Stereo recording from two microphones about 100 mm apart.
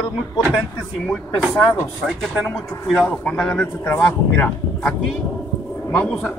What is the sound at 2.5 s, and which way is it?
A man's voice, 5° left (ahead or behind).